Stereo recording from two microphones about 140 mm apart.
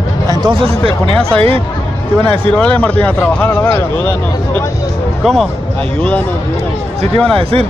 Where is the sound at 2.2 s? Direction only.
10° left (ahead or behind).